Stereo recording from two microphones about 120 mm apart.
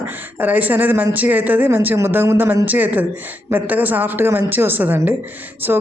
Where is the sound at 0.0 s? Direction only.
15° right (ahead or behind).